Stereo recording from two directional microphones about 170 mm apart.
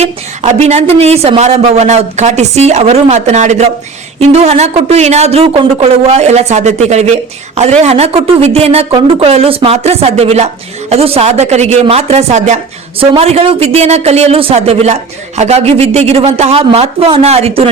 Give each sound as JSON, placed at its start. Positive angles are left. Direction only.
{"t": 0.0, "sound": "speech", "side_deg": -40}